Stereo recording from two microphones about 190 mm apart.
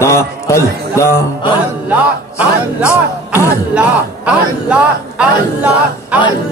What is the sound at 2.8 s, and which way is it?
Speech, 15° left (ahead or behind).